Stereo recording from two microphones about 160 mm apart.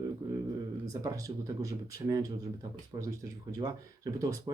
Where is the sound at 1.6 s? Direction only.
20° right (ahead or behind).